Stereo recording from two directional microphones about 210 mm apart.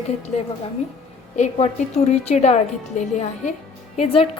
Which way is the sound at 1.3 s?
35° left (ahead or behind).